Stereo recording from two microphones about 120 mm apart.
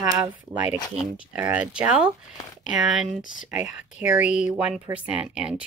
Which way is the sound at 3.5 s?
15° right (ahead or behind).